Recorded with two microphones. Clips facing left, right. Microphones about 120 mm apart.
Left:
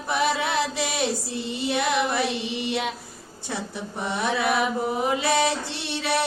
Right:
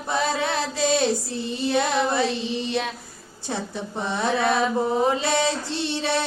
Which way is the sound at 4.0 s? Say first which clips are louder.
Right 2 dB; 25° right (ahead or behind).